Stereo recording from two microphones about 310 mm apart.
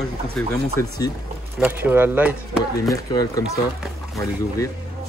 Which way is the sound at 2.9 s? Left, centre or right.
Centre.